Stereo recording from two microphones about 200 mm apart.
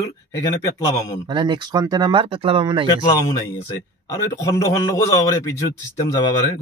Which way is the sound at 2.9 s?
20° left (ahead or behind).